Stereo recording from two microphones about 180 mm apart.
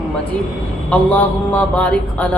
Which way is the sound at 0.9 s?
5° left (ahead or behind).